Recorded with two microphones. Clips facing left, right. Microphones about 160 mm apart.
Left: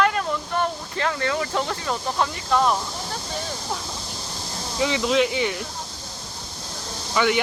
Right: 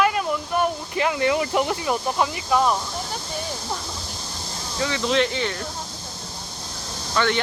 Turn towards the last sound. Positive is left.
turn(degrees=10)  # may be behind; listen again after turning